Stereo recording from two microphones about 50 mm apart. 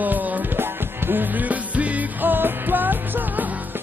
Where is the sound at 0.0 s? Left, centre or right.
Right.